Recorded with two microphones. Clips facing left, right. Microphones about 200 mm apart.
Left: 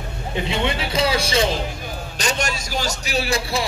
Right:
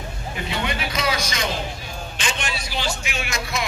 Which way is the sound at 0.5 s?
25° left (ahead or behind).